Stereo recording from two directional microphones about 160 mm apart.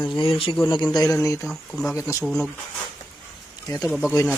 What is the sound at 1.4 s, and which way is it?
Speech, centre (ahead or behind).